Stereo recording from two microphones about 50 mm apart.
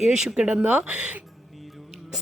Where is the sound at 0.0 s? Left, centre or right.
Centre.